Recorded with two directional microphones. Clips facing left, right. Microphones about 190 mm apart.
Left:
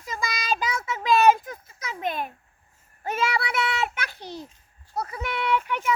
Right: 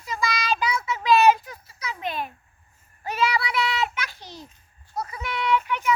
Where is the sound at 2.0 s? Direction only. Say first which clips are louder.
Left 2 dB; 50° left (ahead or behind).